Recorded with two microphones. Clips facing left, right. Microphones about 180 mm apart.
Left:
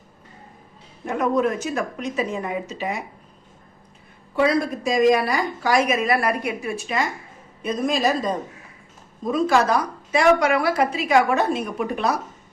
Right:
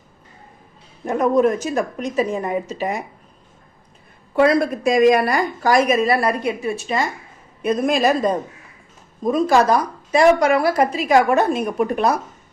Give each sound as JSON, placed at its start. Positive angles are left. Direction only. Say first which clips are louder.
{"t": 1.0, "sound": "a woman's voice", "louder": "right 5 dB", "side_deg": -40}
{"t": 4.4, "sound": "a woman's voice", "louder": "right 4 dB", "side_deg": -55}
{"t": 7.6, "sound": "a woman's voice", "louder": "right 4 dB", "side_deg": -60}
{"t": 9.2, "sound": "a woman's voice", "louder": "right 3 dB", "side_deg": -40}